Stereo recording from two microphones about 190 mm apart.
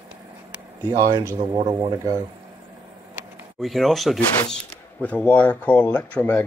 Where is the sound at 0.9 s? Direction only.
15° right (ahead or behind).